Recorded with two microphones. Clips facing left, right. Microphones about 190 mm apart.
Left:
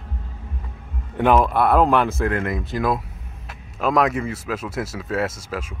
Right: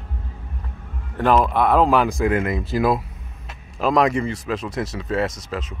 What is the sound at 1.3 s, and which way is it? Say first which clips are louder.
Speech: even; 5° left (ahead or behind).